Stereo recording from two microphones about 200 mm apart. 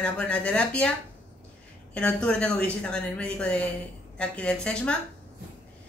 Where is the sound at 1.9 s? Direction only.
5° left (ahead or behind).